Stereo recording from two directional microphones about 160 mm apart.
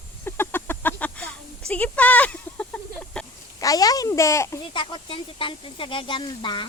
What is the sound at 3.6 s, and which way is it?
Speech, 20° left (ahead or behind).